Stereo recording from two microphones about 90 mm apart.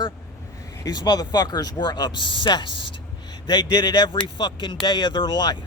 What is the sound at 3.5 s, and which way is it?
A man's voice, 50° left (ahead or behind).